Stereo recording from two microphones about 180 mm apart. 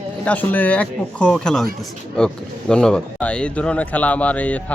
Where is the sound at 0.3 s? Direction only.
10° left (ahead or behind).